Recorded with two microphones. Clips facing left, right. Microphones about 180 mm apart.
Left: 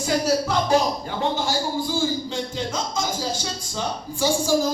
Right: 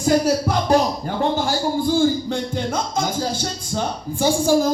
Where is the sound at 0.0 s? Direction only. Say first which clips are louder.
Right 4 dB; 50° right (ahead or behind).